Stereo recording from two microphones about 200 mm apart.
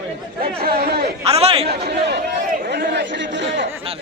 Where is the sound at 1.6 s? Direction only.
55° right (ahead or behind).